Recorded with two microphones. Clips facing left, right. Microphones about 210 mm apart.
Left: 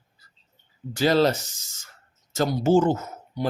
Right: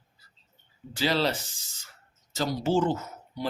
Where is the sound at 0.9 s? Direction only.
45° left (ahead or behind).